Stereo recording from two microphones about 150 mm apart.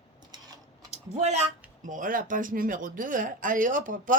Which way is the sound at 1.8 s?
60° right (ahead or behind).